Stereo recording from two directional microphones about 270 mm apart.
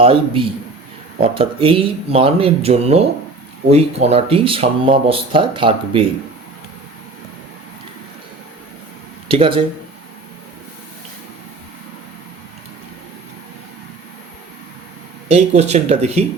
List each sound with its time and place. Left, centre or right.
0.0 s speech: centre
9.3 s speech: centre
15.3 s speech: right